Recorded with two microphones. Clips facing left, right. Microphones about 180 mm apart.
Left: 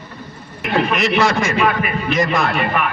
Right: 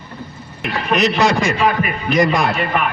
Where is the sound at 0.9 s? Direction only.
20° right (ahead or behind).